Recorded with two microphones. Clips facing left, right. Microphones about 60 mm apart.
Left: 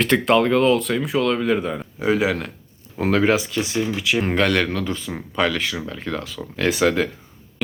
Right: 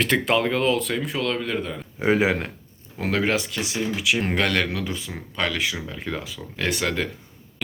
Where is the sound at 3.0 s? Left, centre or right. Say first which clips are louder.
Left 5 dB; centre.